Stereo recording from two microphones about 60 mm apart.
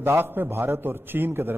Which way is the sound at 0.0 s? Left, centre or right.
Right.